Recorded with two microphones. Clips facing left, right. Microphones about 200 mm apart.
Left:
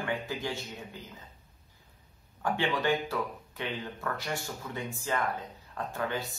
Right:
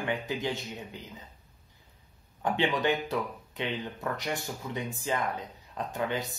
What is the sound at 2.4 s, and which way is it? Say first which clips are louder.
Speech: right 2 dB; 20° right (ahead or behind).